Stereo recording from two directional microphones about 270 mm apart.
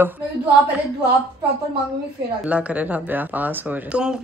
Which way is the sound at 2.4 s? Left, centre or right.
Centre.